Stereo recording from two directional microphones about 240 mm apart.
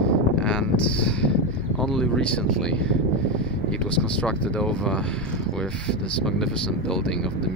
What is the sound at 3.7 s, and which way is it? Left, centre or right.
Speech, centre.